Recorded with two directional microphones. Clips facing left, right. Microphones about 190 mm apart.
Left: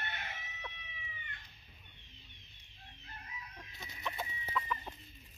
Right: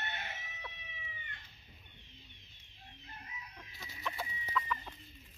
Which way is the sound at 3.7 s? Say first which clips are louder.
Even; 20° left (ahead or behind).